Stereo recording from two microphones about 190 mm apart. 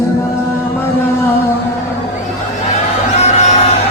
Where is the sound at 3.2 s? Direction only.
35° left (ahead or behind).